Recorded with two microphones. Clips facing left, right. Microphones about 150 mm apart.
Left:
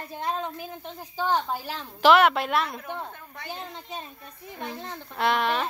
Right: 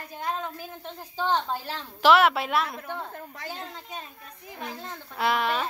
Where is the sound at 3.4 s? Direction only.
20° left (ahead or behind).